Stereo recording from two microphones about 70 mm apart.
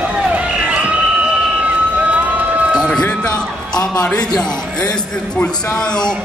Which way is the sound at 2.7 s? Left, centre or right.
Centre.